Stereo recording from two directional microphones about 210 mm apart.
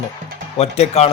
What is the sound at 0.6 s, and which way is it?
Speech, 30° left (ahead or behind).